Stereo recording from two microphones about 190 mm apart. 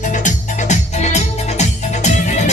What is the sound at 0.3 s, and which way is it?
Music, 40° left (ahead or behind).